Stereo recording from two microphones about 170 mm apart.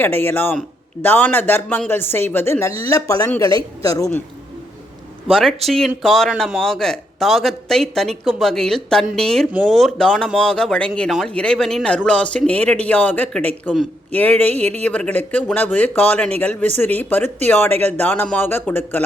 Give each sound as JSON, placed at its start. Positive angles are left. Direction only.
{"t": 0.0, "sound": "a woman's voice", "side_deg": 10}
{"t": 5.3, "sound": "a woman's voice", "side_deg": 0}